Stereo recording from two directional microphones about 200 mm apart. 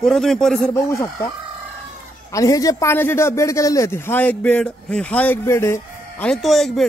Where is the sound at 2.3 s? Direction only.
15° left (ahead or behind).